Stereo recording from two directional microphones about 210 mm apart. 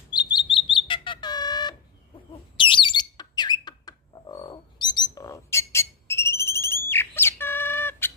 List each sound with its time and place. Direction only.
0.1 s bird: 20° left (ahead or behind)